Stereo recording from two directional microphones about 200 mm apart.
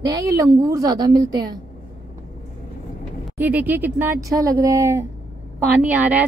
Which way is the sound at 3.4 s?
10° right (ahead or behind).